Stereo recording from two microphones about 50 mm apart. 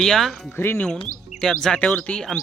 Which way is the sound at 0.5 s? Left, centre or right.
Left.